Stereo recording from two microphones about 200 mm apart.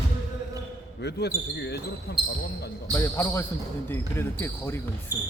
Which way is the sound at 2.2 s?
25° right (ahead or behind).